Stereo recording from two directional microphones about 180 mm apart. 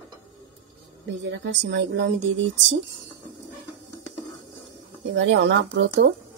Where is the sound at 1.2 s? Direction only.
85° right.